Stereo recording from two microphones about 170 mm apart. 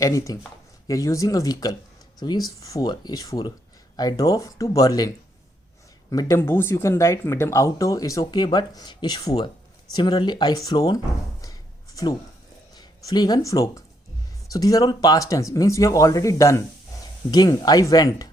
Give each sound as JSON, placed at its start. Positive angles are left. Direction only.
{"t": 0.0, "sound": "speech", "side_deg": 20}
{"t": 11.4, "sound": "a sound", "side_deg": 20}
{"t": 12.7, "sound": "speech", "side_deg": 25}